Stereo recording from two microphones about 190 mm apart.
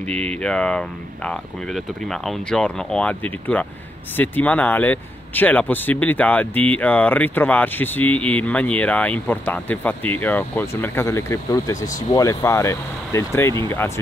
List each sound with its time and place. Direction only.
0.1 s speech: 5° left (ahead or behind)